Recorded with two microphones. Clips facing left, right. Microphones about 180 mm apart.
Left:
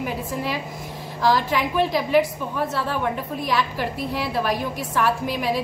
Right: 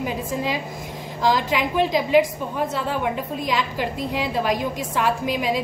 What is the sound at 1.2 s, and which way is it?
A woman's voice, 15° right (ahead or behind).